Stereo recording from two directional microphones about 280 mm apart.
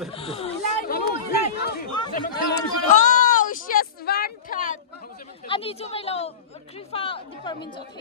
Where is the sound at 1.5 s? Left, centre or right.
Left.